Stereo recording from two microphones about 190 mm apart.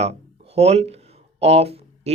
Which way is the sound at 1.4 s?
35° right (ahead or behind).